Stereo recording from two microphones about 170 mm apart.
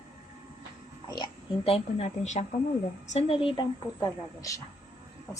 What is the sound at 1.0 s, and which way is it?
A woman's voice, 25° left (ahead or behind).